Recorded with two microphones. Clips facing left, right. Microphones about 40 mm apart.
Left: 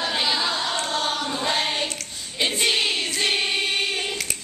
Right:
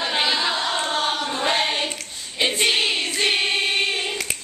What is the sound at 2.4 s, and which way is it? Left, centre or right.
Choir, centre.